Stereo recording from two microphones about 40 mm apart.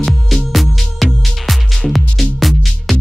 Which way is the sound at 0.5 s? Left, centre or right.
Centre.